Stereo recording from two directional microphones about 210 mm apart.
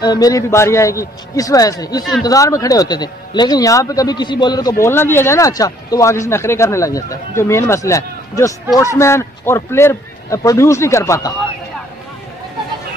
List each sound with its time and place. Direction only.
0.0 s a man's voice: 20° left (ahead or behind)